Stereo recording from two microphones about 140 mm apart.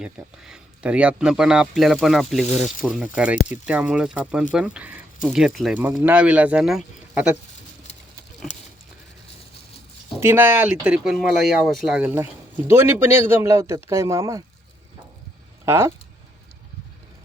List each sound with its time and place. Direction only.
0.0 s speech: 5° right (ahead or behind)
5.9 s speech: 15° right (ahead or behind)
10.2 s speech: 15° right (ahead or behind)
15.6 s speech: 20° right (ahead or behind)